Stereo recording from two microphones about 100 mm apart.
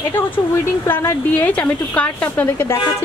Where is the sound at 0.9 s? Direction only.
20° left (ahead or behind).